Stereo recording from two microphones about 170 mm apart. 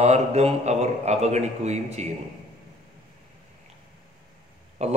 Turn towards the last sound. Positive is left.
turn(degrees=-40)  # may be behind; listen again after turning